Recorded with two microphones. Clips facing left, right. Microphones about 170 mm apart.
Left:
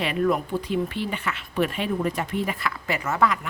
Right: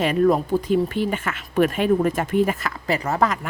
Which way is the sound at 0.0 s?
40° right (ahead or behind).